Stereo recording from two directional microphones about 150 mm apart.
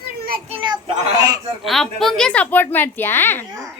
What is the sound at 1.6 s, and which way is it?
A child's voice, centre (ahead or behind).